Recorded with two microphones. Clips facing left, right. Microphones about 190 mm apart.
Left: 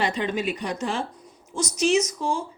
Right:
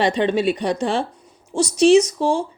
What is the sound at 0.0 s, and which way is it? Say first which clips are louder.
A woman's voice: right 7 dB; 30° right (ahead or behind).